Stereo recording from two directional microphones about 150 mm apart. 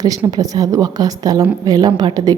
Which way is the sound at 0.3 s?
25° right (ahead or behind).